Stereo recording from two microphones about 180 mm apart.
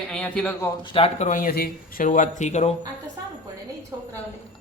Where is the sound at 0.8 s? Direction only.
30° left (ahead or behind).